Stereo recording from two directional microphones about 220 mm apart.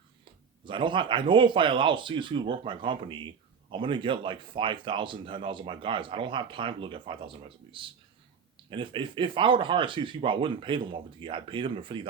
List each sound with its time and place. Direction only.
0.6 s speech: 20° right (ahead or behind)